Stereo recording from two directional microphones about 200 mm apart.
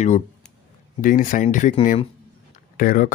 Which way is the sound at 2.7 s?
45° left (ahead or behind).